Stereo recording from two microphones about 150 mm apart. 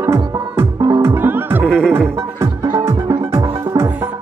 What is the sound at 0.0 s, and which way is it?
Music, 15° right (ahead or behind).